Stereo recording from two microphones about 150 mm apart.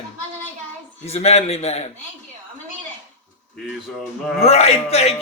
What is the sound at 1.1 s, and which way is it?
Speech, 45° left (ahead or behind).